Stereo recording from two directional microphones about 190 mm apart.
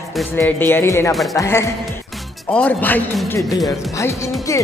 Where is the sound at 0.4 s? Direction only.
10° left (ahead or behind).